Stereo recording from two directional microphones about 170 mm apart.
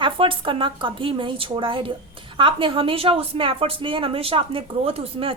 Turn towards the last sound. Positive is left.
turn(degrees=-35)  # may be behind; listen again after turning